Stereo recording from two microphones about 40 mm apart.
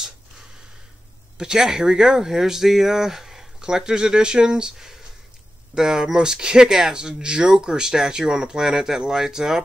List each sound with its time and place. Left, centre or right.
1.4 s speech: centre